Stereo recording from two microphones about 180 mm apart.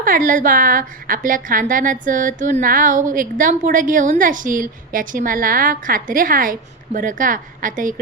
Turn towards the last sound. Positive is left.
turn(degrees=-50)  # may be behind; listen again after turning